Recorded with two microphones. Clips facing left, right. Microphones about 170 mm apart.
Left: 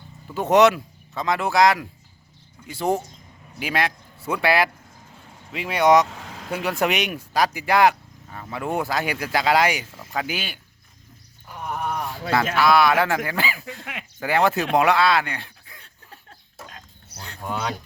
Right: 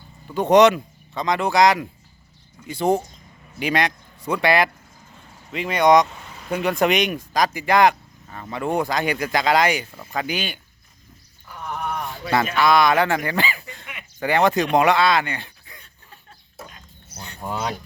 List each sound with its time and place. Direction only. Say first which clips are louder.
0.3 s speech: right 2 dB; centre (ahead or behind)
6.1 s vehicle: left 3 dB; 90° left
6.5 s speech: right 3 dB; 5° left (ahead or behind)
11.4 s a sound: left 1 dB; 15° left (ahead or behind)
11.8 s a sound: even; centre (ahead or behind)
12.5 s speech: right 1 dB; 5° left (ahead or behind)